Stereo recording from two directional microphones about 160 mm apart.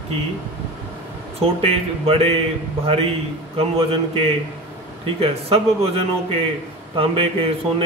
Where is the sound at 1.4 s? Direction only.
35° right (ahead or behind).